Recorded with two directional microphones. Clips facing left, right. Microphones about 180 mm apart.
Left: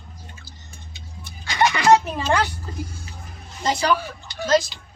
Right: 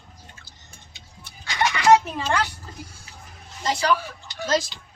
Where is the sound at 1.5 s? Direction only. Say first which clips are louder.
Left 4 dB; 40° left (ahead or behind).